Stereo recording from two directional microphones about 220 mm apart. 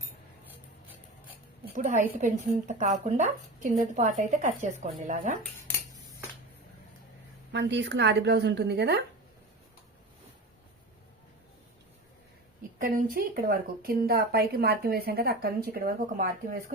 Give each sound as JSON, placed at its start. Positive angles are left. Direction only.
{"t": 1.7, "sound": "speech", "side_deg": -35}
{"t": 7.5, "sound": "speech", "side_deg": -55}
{"t": 12.8, "sound": "speech", "side_deg": -40}